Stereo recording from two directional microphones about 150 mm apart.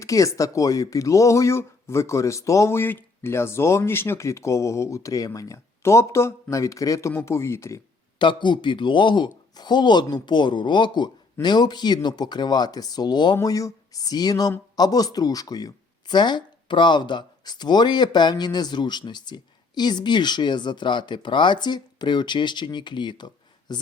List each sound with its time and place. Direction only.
0.0 s speech: 20° left (ahead or behind)
8.2 s a man's voice: 30° left (ahead or behind)